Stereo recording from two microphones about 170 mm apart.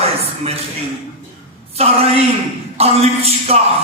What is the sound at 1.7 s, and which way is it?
A man's voice, 35° right (ahead or behind).